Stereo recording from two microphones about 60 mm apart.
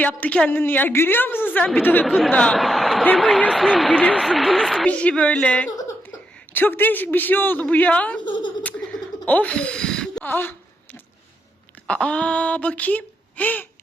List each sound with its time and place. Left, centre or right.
0.0 s speech: left
0.6 s a man's voice: left
2.0 s speech: centre
2.3 s speech: centre
2.6 s a sound: centre
3.2 s speech: centre
3.8 s speech: centre
4.2 s speech: centre
4.9 s speech: left
6.5 s a man's voice: left
8.8 s a sound: centre
9.2 s speech: left
10.2 s a man's voice: left
11.9 s speech: centre